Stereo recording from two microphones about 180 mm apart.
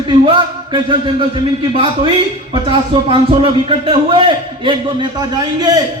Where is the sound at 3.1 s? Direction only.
30° right (ahead or behind).